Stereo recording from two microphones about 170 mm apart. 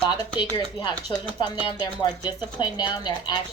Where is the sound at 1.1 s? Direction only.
25° left (ahead or behind).